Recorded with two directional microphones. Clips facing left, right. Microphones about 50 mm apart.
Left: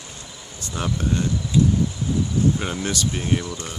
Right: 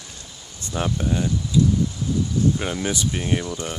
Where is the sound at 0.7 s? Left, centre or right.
Centre.